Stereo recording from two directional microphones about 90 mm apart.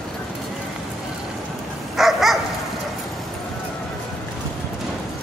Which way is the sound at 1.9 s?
5° right (ahead or behind).